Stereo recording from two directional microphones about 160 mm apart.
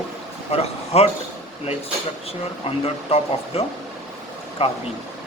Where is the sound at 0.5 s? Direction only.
40° left (ahead or behind).